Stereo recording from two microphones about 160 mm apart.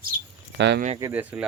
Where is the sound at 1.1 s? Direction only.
10° right (ahead or behind).